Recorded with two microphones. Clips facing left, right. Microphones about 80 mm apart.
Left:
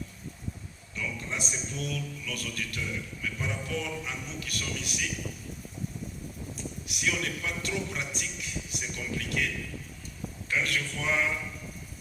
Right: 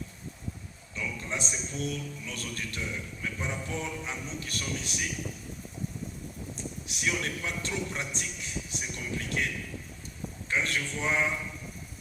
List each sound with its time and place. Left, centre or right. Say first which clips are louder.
1.3 s a man's voice: even; right
6.8 s a man's voice: even; right
10.5 s a man's voice: even; right